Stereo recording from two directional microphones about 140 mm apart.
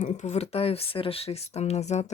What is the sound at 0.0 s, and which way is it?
Speech, 55° left (ahead or behind).